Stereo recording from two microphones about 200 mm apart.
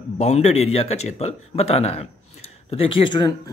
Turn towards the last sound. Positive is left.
turn(degrees=25)  # may be behind; listen again after turning